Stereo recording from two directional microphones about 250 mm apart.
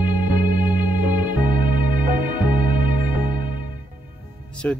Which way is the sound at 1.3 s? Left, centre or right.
Right.